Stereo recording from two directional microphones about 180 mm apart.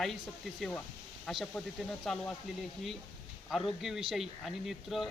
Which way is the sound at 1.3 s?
Centre (ahead or behind).